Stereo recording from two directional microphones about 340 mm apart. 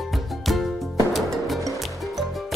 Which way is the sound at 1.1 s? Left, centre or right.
Centre.